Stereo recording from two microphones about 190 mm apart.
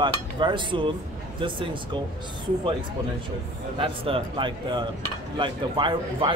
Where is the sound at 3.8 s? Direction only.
25° right (ahead or behind).